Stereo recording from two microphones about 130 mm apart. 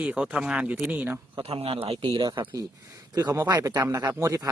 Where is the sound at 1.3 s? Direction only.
50° right (ahead or behind).